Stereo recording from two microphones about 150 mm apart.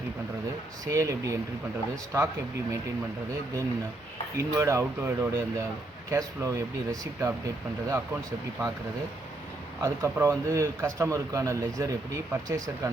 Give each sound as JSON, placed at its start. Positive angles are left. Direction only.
{"t": 0.9, "sound": "speech", "side_deg": -20}
{"t": 4.4, "sound": "speech", "side_deg": -20}
{"t": 9.8, "sound": "speech", "side_deg": -20}